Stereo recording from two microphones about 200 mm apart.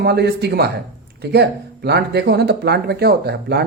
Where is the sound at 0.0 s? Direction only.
55° right (ahead or behind).